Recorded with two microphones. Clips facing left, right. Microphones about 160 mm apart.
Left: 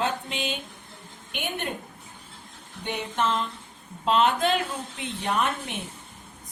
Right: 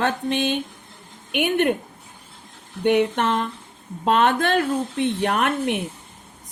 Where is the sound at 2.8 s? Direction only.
65° right (ahead or behind).